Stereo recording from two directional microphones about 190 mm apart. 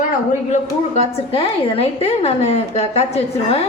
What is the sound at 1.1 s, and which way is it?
A woman's voice, 30° left (ahead or behind).